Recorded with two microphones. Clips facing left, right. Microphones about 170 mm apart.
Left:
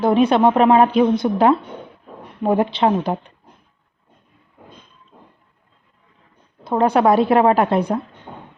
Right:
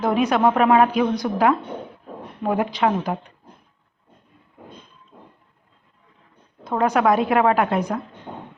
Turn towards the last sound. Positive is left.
turn(degrees=30)  # may be behind; listen again after turning